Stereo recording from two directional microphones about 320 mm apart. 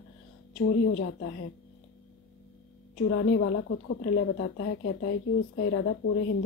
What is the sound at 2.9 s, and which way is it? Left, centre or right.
A woman's voice, left.